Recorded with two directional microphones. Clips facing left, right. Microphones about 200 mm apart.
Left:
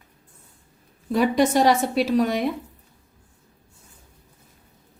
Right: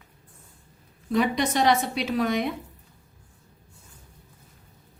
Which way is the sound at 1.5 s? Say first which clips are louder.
Left 3 dB; 45° left (ahead or behind).